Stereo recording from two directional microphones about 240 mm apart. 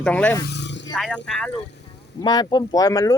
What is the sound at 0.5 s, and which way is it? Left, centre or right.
Vehicle, left.